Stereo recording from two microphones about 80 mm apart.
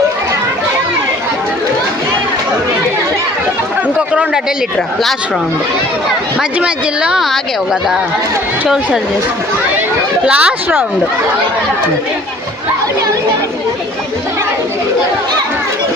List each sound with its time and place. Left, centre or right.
6.6 s a woman's voice: centre
8.6 s a woman's voice: centre
10.2 s a woman's voice: centre